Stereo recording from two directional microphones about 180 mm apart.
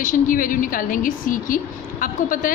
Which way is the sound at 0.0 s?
50° left (ahead or behind).